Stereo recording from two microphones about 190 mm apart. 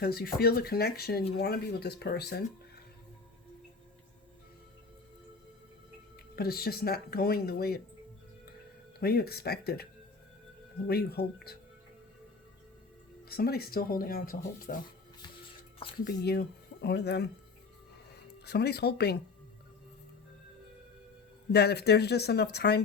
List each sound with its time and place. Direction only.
0.0 s speech: 55° left (ahead or behind)
6.3 s speech: 55° left (ahead or behind)
9.0 s speech: 55° left (ahead or behind)
10.8 s speech: 55° left (ahead or behind)
13.2 s speech: 55° left (ahead or behind)
16.0 s speech: 55° left (ahead or behind)
18.4 s speech: 60° left (ahead or behind)
21.5 s speech: 60° left (ahead or behind)